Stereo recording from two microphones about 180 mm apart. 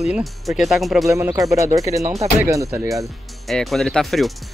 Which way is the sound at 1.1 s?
15° right (ahead or behind).